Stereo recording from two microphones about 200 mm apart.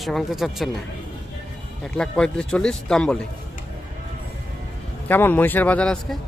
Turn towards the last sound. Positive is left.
turn(degrees=5)  # may be behind; listen again after turning